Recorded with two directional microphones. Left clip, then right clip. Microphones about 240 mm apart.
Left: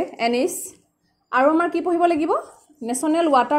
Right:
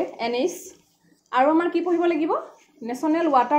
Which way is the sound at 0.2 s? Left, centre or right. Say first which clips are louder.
Left 6 dB; left.